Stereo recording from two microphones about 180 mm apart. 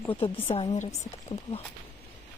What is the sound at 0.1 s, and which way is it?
Speech, 30° left (ahead or behind).